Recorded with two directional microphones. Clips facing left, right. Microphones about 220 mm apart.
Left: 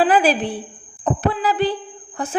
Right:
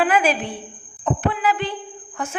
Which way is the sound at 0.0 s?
35° left (ahead or behind).